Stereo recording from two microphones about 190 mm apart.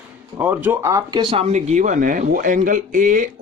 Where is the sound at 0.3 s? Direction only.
10° right (ahead or behind).